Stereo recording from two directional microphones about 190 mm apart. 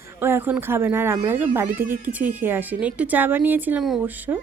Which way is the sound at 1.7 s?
45° right (ahead or behind).